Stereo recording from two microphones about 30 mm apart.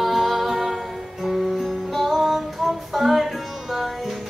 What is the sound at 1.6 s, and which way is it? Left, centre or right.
Music, centre.